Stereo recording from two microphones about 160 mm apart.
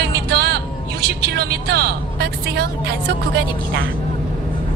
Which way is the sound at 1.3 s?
90° right.